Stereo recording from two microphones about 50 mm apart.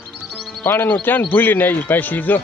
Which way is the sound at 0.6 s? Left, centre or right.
Left.